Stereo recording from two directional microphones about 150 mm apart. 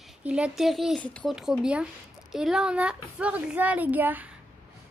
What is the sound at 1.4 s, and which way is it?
Speech, 5° right (ahead or behind).